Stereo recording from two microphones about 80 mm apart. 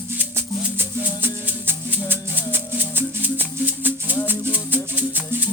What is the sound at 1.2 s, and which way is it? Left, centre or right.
Music, right.